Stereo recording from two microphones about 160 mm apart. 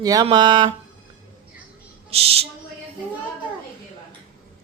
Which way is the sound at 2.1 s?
40° right (ahead or behind).